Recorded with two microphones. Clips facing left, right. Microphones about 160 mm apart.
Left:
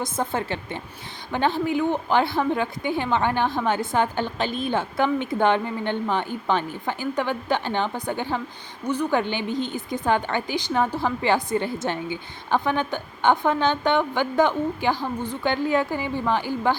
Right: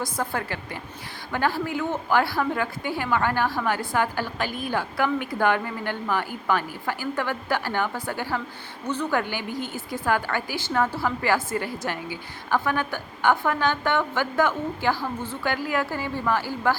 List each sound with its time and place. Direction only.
0.0 s a woman's voice: 20° left (ahead or behind)